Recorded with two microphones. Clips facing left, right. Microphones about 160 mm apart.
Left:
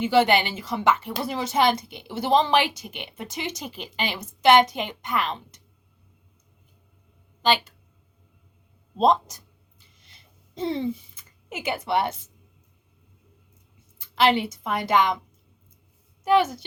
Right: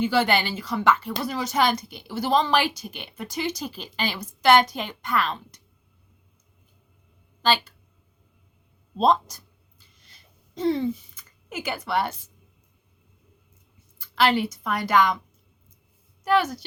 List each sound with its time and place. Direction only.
0.0 s speech: 20° left (ahead or behind)
7.4 s speech: 20° left (ahead or behind)
9.0 s speech: 20° left (ahead or behind)
9.8 s a sound: 20° left (ahead or behind)
14.0 s speech: 20° left (ahead or behind)
16.2 s speech: 25° left (ahead or behind)